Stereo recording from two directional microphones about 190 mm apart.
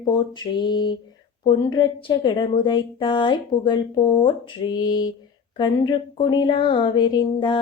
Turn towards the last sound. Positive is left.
turn(degrees=25)  # may be behind; listen again after turning